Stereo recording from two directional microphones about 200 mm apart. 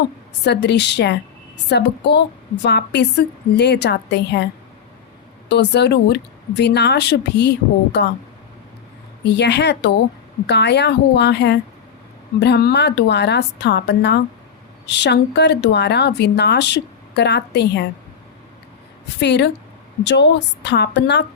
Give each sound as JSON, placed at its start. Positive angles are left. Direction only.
{"t": 0.4, "sound": "speech", "side_deg": 55}
{"t": 5.5, "sound": "speech", "side_deg": 60}
{"t": 9.2, "sound": "speech", "side_deg": 60}
{"t": 19.2, "sound": "speech", "side_deg": 60}